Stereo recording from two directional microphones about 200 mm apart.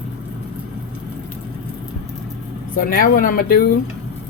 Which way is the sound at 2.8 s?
45° left (ahead or behind).